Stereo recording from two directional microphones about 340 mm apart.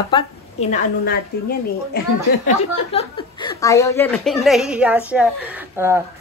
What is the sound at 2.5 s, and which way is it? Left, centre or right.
A woman's voice, centre.